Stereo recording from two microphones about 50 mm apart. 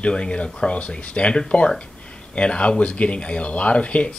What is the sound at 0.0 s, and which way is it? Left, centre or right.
Speech, centre.